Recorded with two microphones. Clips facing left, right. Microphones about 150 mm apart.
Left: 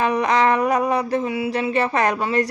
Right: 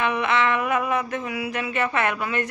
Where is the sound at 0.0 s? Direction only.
40° left (ahead or behind).